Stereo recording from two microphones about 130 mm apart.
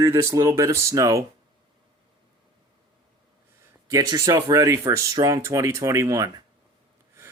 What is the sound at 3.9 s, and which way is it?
Speech, 30° right (ahead or behind).